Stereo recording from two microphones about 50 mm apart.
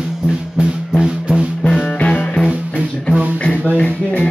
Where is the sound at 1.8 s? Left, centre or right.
Left.